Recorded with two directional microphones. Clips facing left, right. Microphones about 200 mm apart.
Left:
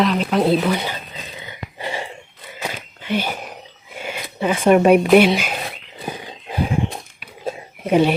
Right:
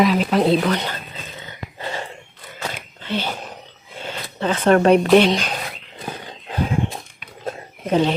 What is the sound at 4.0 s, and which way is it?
Speech, 10° left (ahead or behind).